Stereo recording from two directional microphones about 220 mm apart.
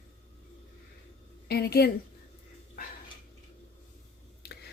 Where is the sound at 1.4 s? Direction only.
45° left (ahead or behind).